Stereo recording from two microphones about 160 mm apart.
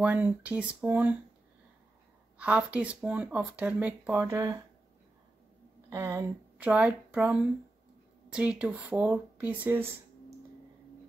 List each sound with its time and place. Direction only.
0.0 s speech: 10° right (ahead or behind)
2.3 s speech: 10° right (ahead or behind)
5.9 s speech: 20° right (ahead or behind)
6.6 s speech: 10° right (ahead or behind)